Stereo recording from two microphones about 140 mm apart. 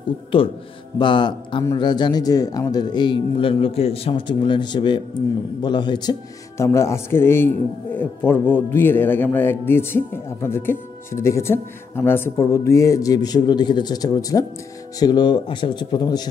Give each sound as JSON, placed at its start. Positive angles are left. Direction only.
{"t": 0.3, "sound": "speech", "side_deg": 40}
{"t": 6.6, "sound": "a man's voice", "side_deg": 20}